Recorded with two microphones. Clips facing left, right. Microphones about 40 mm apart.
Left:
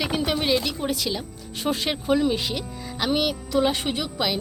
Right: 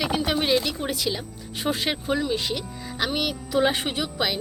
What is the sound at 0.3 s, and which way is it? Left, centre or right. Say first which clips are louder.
Speech: right 1 dB; centre.